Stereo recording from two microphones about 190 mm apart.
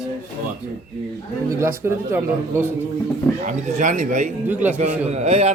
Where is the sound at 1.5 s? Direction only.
15° right (ahead or behind).